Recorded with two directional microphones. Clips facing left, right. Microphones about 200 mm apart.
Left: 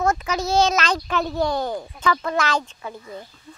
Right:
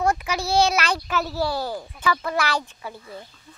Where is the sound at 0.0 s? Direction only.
10° right (ahead or behind).